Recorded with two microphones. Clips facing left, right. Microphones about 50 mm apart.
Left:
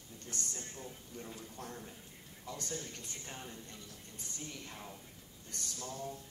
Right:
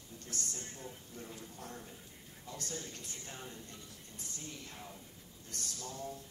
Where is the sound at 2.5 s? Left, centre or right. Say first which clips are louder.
Even; left.